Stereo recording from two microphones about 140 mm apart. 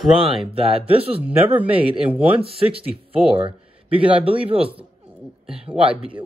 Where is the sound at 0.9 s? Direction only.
45° right (ahead or behind).